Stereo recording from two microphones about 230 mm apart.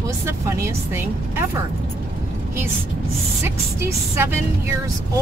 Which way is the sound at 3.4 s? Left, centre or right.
Centre.